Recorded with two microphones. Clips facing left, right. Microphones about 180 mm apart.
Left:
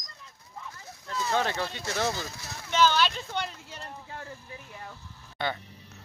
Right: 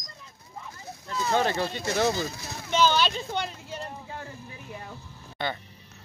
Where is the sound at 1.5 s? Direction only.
10° right (ahead or behind).